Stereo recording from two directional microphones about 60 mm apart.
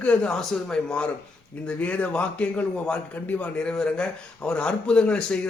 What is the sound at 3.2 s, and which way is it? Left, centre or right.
A man's voice, left.